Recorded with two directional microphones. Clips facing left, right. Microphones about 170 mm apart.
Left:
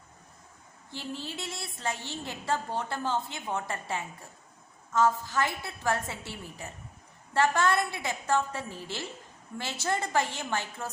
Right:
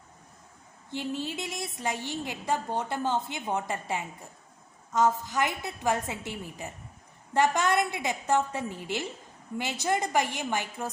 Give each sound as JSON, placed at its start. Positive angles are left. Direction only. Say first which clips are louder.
{"t": 0.9, "sound": "a woman's voice", "louder": "right 5 dB", "side_deg": -20}